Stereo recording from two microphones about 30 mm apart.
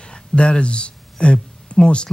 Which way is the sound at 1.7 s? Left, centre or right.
Left.